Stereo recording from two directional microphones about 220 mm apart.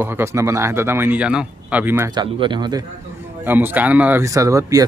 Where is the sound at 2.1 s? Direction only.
20° right (ahead or behind).